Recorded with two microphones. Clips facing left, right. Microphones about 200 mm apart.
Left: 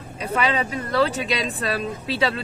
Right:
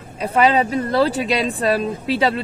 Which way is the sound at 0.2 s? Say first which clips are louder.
Right 7 dB; 35° right (ahead or behind).